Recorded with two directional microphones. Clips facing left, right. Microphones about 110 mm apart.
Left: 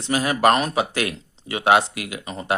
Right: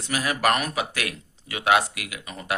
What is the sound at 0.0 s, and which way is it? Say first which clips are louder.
Speech: left 5 dB; 30° left (ahead or behind).